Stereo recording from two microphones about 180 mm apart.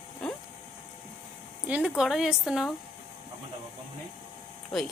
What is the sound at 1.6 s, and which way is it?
A woman's voice, 5° right (ahead or behind).